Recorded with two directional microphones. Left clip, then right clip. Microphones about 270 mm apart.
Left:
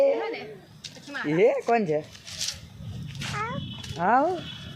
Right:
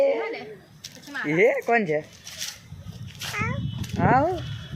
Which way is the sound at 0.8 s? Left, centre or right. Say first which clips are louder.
Right 1 dB; right.